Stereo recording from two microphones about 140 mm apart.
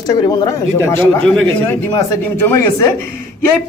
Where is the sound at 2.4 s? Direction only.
20° left (ahead or behind).